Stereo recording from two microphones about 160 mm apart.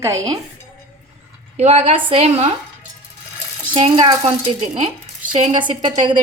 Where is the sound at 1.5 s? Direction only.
40° right (ahead or behind).